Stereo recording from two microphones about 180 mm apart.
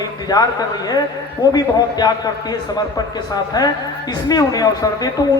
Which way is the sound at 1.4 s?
20° left (ahead or behind).